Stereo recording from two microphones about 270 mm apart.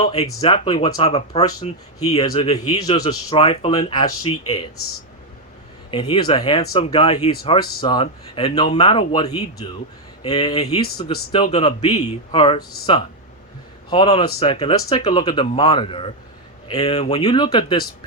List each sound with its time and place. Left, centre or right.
0.0 s speech: left
5.9 s speech: centre
13.9 s speech: centre